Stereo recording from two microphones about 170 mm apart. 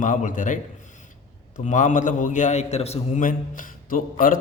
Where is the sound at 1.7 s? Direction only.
45° left (ahead or behind).